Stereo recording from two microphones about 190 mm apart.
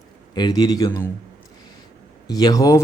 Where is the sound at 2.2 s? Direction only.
20° left (ahead or behind).